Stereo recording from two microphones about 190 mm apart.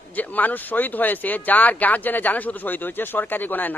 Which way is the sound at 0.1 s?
10° left (ahead or behind).